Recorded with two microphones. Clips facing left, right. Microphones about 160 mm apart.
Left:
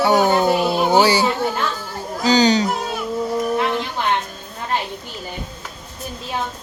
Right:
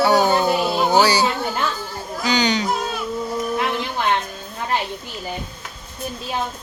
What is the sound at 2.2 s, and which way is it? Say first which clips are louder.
Music: left 5 dB; 35° left (ahead or behind).